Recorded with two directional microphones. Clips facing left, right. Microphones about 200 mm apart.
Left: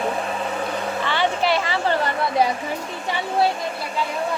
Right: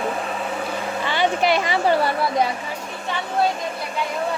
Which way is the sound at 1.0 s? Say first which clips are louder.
Right 3 dB; 15° right (ahead or behind).